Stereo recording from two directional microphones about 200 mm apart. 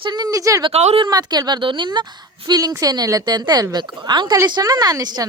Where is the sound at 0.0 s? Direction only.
20° right (ahead or behind).